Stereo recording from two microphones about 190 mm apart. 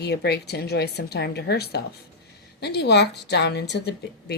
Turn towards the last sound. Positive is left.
turn(degrees=60)  # may be behind; listen again after turning